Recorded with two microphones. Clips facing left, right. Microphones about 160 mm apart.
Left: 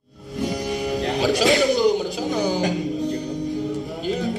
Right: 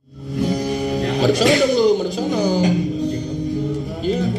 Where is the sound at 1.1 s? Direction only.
Centre (ahead or behind).